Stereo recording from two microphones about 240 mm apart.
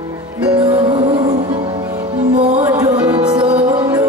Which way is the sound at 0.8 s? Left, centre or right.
Right.